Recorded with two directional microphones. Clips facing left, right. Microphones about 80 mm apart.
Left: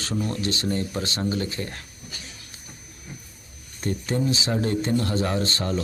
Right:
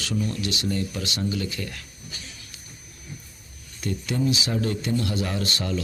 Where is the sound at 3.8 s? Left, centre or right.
Left.